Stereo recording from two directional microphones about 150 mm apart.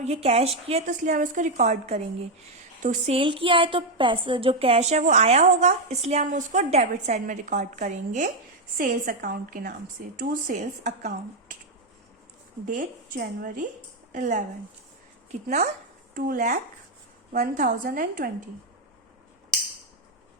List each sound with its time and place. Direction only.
0.0 s a woman's voice: 45° right (ahead or behind)
3.2 s a woman's voice: 35° right (ahead or behind); by 8.3 s 55° right (ahead or behind)
8.8 s a woman's voice: 70° right (ahead or behind)
12.6 s a woman's voice: 65° right (ahead or behind)
14.1 s speech: 55° right (ahead or behind)
15.4 s a woman's voice: 50° right (ahead or behind)
16.1 s a woman's voice: 65° right (ahead or behind)